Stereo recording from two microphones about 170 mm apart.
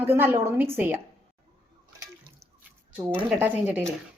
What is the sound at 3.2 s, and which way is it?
Speech, 10° right (ahead or behind).